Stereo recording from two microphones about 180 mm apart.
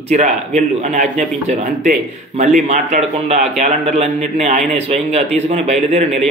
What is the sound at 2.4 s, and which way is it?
A man's voice, 40° right (ahead or behind).